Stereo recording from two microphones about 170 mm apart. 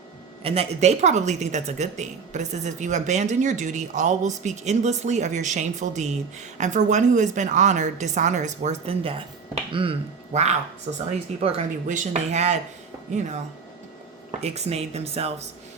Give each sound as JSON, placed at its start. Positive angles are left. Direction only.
{"t": 0.4, "sound": "speech", "side_deg": -35}
{"t": 14.3, "sound": "speech", "side_deg": -40}